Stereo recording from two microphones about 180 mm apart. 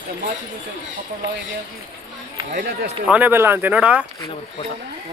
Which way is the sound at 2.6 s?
65° right (ahead or behind).